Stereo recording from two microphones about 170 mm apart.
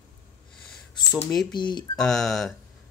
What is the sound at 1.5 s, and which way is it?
Speech, 25° left (ahead or behind).